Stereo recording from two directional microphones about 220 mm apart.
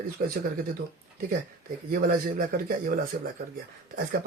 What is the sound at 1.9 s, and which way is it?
Speech, 40° right (ahead or behind).